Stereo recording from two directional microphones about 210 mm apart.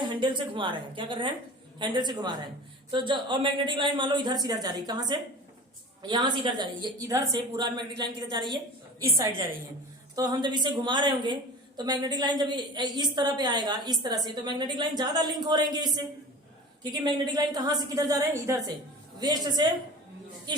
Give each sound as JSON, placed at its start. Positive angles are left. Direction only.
{"t": 0.2, "sound": "a woman's voice", "side_deg": -25}
{"t": 10.2, "sound": "a woman's voice", "side_deg": -20}